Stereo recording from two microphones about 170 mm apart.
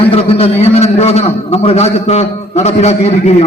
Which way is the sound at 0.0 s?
35° left (ahead or behind).